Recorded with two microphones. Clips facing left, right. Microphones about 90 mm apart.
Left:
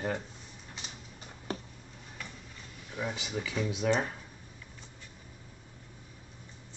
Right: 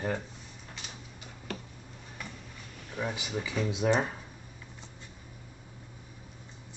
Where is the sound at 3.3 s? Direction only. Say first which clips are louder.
Right 1 dB; 20° right (ahead or behind).